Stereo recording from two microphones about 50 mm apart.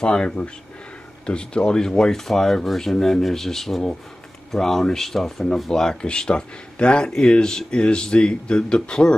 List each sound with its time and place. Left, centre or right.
0.0 s speech: centre